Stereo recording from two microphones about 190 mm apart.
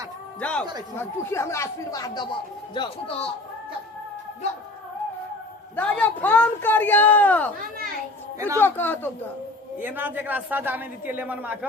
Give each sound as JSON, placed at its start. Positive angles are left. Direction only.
{"t": 0.3, "sound": "a man's voice", "side_deg": 5}
{"t": 5.7, "sound": "speech", "side_deg": 10}
{"t": 8.5, "sound": "speech", "side_deg": 10}
{"t": 9.7, "sound": "a man's voice", "side_deg": -10}